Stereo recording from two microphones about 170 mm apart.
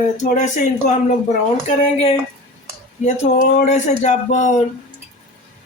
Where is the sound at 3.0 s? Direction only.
45° left (ahead or behind).